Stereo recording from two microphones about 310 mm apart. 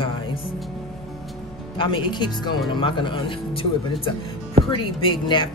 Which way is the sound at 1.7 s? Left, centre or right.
Centre.